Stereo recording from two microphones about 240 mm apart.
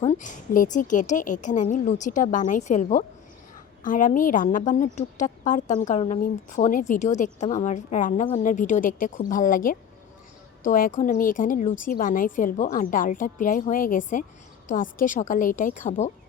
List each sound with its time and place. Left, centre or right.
0.0 s a woman's voice: left